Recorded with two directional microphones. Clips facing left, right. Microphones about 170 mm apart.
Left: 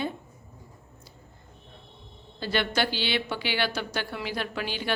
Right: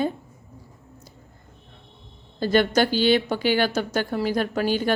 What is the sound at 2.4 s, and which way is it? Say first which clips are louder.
A woman's voice: right 8 dB; 45° right (ahead or behind).